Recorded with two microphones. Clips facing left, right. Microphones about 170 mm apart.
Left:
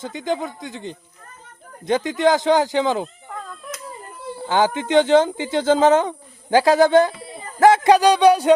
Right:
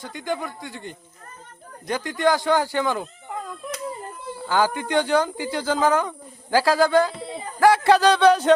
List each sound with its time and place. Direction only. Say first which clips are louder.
0.0 s speech: left 4 dB; 20° left (ahead or behind)
3.2 s a sound: right 2 dB; 10° right (ahead or behind)
4.4 s speech: left 3 dB; 20° left (ahead or behind)